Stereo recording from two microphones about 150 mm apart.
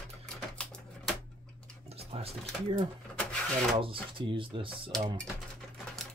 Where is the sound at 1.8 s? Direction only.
40° right (ahead or behind).